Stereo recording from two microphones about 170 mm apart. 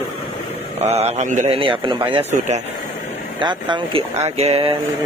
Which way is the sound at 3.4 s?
30° right (ahead or behind).